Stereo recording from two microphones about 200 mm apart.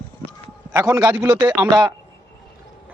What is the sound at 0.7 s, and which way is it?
Speech, 10° right (ahead or behind).